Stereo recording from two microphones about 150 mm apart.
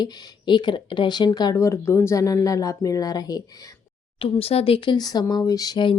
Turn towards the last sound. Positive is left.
turn(degrees=30)  # may be behind; listen again after turning